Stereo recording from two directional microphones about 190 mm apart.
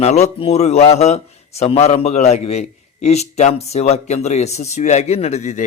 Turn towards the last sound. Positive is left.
turn(degrees=35)  # may be behind; listen again after turning